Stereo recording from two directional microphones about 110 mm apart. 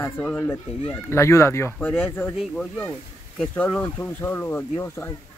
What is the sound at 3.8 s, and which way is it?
Speech, 25° left (ahead or behind).